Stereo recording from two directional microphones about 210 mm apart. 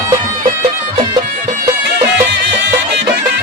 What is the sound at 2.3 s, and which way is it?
Music, 55° right (ahead or behind).